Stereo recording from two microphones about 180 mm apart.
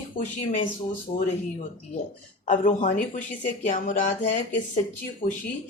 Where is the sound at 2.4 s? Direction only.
45° left (ahead or behind).